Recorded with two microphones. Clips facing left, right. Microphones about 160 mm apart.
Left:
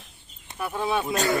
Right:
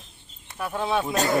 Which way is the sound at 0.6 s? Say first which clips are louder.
Right 1 dB; 5° left (ahead or behind).